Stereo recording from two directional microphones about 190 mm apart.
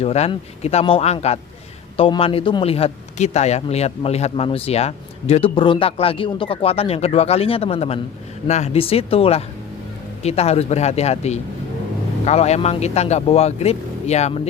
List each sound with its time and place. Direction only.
0.0 s a man's voice: 30° left (ahead or behind)